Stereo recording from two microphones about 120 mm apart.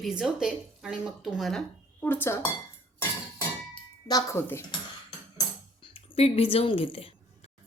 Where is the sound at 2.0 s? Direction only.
15° left (ahead or behind).